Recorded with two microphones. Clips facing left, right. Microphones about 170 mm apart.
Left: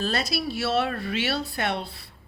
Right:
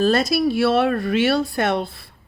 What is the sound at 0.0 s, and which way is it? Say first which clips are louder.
Speech: right 10 dB; 50° right (ahead or behind).